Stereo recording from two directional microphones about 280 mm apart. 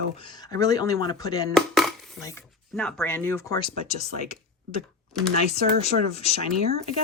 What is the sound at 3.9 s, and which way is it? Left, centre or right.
Speech, left.